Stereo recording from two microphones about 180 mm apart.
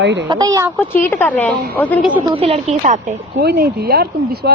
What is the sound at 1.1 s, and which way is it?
A woman's voice, 10° left (ahead or behind).